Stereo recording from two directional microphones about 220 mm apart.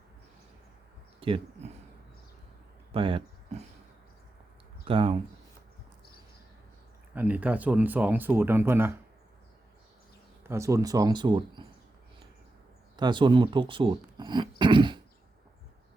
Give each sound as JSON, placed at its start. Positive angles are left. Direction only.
{"t": 1.2, "sound": "speech", "side_deg": -25}
{"t": 2.9, "sound": "speech", "side_deg": -25}
{"t": 4.9, "sound": "speech", "side_deg": -25}
{"t": 7.1, "sound": "speech", "side_deg": -5}
{"t": 10.4, "sound": "speech", "side_deg": -10}
{"t": 13.0, "sound": "speech", "side_deg": -20}
{"t": 14.6, "sound": "a sound", "side_deg": -20}